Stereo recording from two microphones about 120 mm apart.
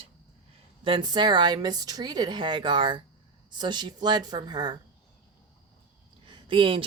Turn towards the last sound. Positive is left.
turn(degrees=-45)  # may be behind; listen again after turning